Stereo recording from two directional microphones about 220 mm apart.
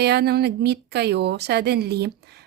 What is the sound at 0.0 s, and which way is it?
Speech, 45° right (ahead or behind).